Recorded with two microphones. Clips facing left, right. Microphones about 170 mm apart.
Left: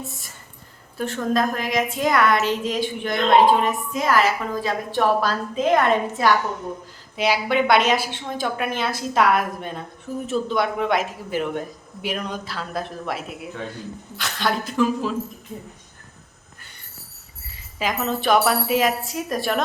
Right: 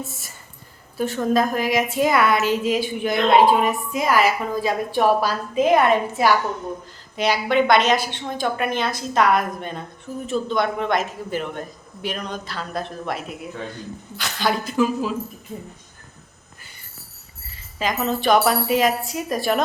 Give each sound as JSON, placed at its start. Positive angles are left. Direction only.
{"t": 0.0, "sound": "a woman's voice", "side_deg": -5}
{"t": 7.2, "sound": "a woman's voice", "side_deg": 5}
{"t": 17.7, "sound": "a woman's voice", "side_deg": 0}